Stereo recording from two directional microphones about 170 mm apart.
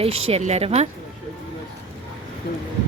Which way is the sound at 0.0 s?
35° right (ahead or behind).